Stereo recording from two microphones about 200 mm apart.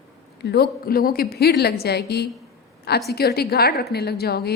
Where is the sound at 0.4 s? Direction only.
50° left (ahead or behind).